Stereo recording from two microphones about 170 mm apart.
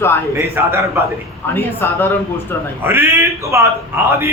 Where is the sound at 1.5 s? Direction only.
15° left (ahead or behind).